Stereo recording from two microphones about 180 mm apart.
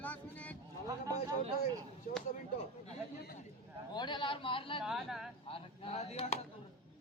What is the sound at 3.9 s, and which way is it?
Speech, 25° left (ahead or behind).